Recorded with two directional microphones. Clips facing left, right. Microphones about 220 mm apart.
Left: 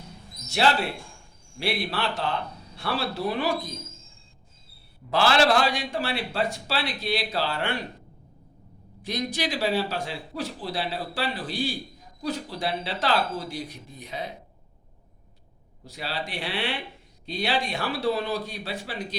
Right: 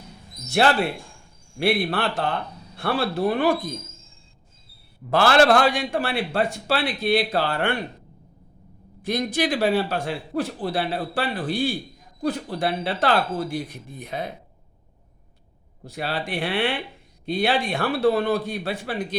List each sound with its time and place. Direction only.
0.5 s a man's voice: 55° right (ahead or behind)
5.1 s a man's voice: 50° right (ahead or behind)
9.0 s a man's voice: 50° right (ahead or behind)
15.8 s a man's voice: 55° right (ahead or behind)